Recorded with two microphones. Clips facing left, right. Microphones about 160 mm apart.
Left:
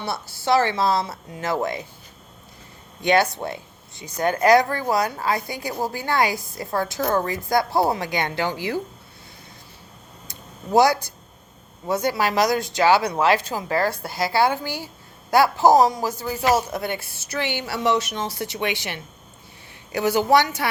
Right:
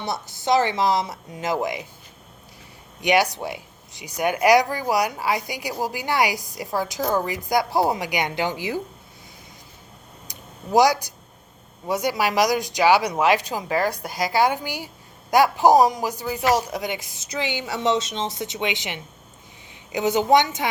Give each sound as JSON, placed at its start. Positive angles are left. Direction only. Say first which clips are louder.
{"t": 0.0, "sound": "a woman's voice", "louder": "even", "side_deg": -20}
{"t": 3.0, "sound": "a woman's voice", "louder": "left 1 dB", "side_deg": -15}
{"t": 10.2, "sound": "a sound", "louder": "left 1 dB", "side_deg": -15}
{"t": 11.9, "sound": "a woman's voice", "louder": "left 1 dB", "side_deg": -15}